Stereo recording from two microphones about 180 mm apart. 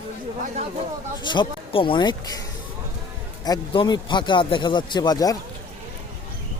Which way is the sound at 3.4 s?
20° left (ahead or behind).